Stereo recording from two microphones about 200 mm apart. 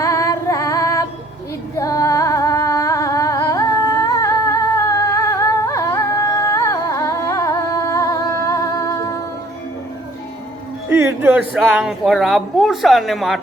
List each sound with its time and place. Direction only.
0.0 s music: 15° left (ahead or behind)
1.7 s humming: 15° left (ahead or behind)
10.8 s music: 10° right (ahead or behind)
11.7 s speech: 5° right (ahead or behind)